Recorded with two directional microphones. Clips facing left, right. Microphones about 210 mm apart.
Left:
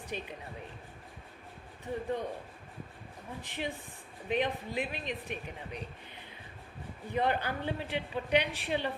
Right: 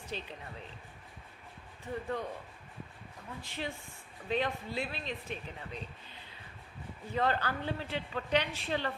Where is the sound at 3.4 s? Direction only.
15° left (ahead or behind).